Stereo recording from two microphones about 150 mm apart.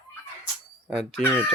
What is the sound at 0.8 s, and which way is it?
Speech, centre (ahead or behind).